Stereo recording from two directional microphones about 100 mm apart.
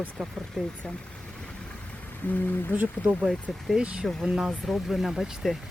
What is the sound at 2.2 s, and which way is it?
Speech, 20° left (ahead or behind).